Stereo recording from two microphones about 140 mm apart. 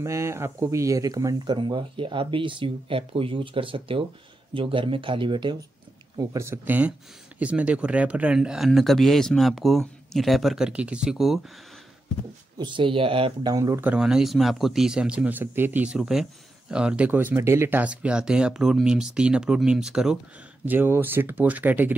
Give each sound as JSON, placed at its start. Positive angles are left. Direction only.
{"t": 0.0, "sound": "speech", "side_deg": -20}
{"t": 6.1, "sound": "speech", "side_deg": -20}
{"t": 12.5, "sound": "speech", "side_deg": -35}
{"t": 13.5, "sound": "speech", "side_deg": -20}
{"t": 13.8, "sound": "speech", "side_deg": -5}